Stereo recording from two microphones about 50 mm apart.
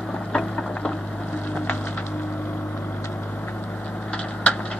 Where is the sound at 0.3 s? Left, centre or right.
Centre.